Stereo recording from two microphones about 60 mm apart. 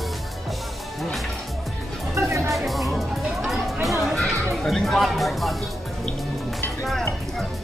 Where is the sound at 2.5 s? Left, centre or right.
Centre.